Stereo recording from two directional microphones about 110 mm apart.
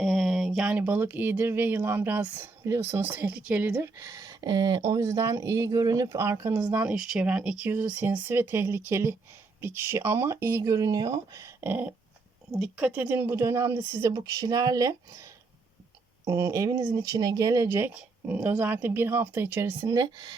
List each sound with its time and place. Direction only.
0.0 s speech: centre (ahead or behind); by 6.6 s 25° right (ahead or behind)
6.6 s speech: 10° right (ahead or behind); by 11.5 s 30° right (ahead or behind)
11.6 s speech: 15° right (ahead or behind)
12.5 s speech: 5° right (ahead or behind)
13.1 s speech: 20° right (ahead or behind)
14.3 s speech: 35° right (ahead or behind)
17.9 s speech: 15° right (ahead or behind)
19.9 s speech: 35° right (ahead or behind)